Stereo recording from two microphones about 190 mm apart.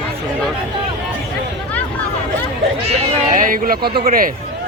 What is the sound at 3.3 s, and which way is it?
Speech, 45° right (ahead or behind).